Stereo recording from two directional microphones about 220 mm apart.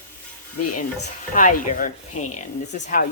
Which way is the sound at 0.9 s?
45° left (ahead or behind).